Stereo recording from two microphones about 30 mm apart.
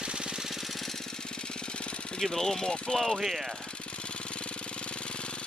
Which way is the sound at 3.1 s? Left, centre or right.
Centre.